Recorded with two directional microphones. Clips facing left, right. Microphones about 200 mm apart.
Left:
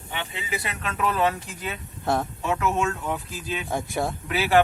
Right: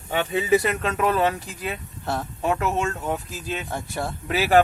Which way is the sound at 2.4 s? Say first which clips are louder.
Right 3 dB; 35° right (ahead or behind).